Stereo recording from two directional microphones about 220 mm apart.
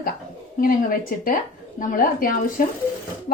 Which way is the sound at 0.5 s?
40° left (ahead or behind).